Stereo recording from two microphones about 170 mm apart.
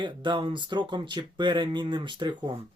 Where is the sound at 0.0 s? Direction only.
25° right (ahead or behind).